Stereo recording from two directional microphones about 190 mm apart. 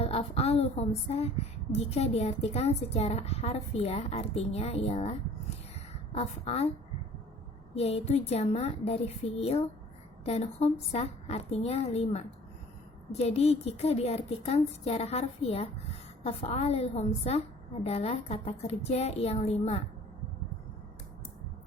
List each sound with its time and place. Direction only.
0.0 s a woman's voice: 30° left (ahead or behind)
7.8 s a woman's voice: 35° left (ahead or behind)